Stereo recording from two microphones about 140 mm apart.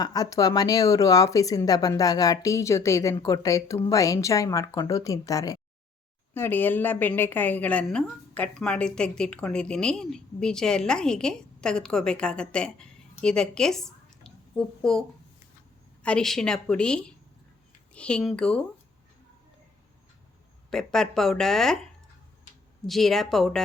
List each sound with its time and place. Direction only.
0.0 s speech: 25° left (ahead or behind)
6.3 s a woman's voice: 15° left (ahead or behind)
16.0 s a woman's voice: 5° left (ahead or behind)
20.7 s a woman's voice: 5° left (ahead or behind)
22.9 s a woman's voice: centre (ahead or behind)